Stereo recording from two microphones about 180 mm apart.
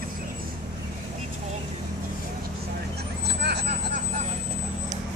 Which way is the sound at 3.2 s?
65° right (ahead or behind).